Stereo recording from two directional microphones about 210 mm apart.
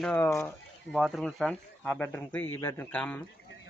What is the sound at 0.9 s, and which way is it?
Speech, centre (ahead or behind).